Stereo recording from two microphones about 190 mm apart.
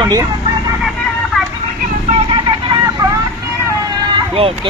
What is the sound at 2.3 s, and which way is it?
Vehicle, 25° right (ahead or behind).